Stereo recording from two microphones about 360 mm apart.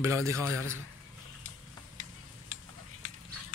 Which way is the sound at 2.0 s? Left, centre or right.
Right.